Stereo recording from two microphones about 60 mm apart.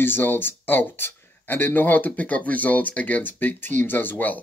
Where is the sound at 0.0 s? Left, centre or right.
Left.